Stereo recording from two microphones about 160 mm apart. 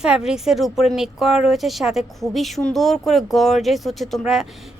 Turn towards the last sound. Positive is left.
turn(degrees=0)  # may be behind; listen again after turning